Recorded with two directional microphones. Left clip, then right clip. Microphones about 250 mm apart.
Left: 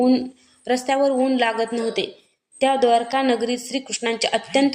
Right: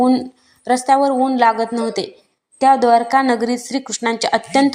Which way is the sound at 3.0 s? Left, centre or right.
Right.